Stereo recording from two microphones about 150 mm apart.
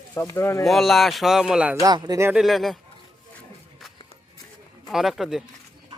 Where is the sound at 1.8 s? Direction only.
25° right (ahead or behind).